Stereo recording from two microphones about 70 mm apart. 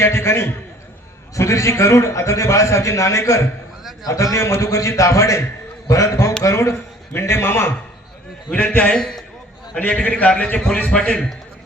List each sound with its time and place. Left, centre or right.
0.0 s a man's voice: left
8.4 s a man's voice: centre
9.7 s a man's voice: left